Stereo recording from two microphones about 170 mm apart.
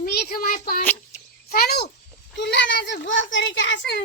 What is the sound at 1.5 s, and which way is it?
Speech, 65° left (ahead or behind).